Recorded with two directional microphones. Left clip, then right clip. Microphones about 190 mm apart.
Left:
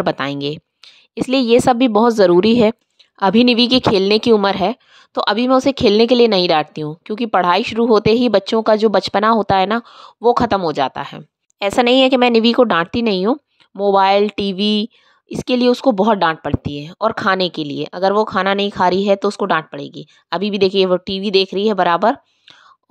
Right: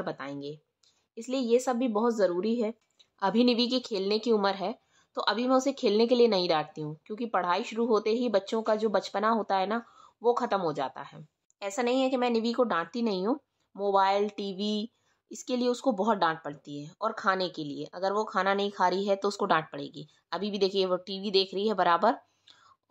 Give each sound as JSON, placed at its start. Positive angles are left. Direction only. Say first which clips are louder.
{"t": 0.0, "sound": "a woman's voice", "louder": "left 17 dB", "side_deg": 50}
{"t": 3.2, "sound": "a woman's voice", "louder": "left 13 dB", "side_deg": 40}